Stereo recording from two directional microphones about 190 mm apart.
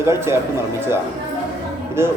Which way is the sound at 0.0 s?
15° right (ahead or behind).